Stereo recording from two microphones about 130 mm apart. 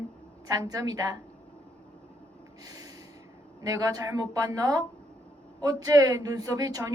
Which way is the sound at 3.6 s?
25° right (ahead or behind).